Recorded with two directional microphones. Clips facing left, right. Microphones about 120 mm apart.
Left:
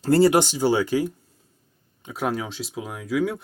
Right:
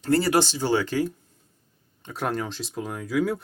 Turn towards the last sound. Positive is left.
turn(degrees=0)  # may be behind; listen again after turning